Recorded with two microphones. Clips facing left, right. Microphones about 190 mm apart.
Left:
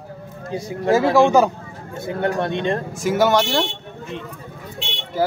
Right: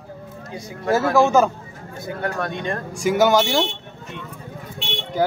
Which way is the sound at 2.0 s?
25° left (ahead or behind).